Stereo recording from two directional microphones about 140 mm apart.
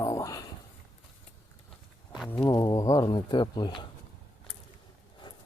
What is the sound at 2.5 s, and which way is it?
Speech, 30° left (ahead or behind).